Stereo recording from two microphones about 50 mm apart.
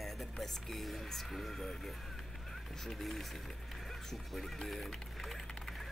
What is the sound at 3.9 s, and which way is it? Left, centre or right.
Music, centre.